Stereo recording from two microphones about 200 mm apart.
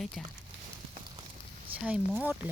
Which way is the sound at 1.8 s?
5° right (ahead or behind).